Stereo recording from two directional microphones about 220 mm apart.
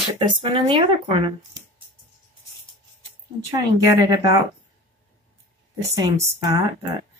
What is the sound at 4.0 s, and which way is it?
Speech, 15° right (ahead or behind).